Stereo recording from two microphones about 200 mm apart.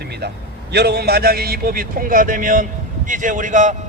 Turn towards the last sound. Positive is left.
turn(degrees=-40)  # may be behind; listen again after turning